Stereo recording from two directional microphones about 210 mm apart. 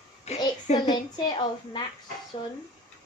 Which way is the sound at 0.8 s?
20° left (ahead or behind).